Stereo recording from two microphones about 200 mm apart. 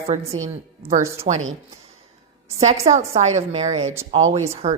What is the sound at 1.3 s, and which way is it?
Speech, 35° right (ahead or behind).